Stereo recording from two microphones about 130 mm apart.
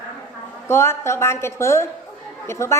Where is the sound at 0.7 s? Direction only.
20° left (ahead or behind).